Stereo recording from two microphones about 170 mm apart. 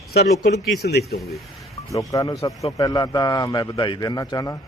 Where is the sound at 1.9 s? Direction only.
20° left (ahead or behind).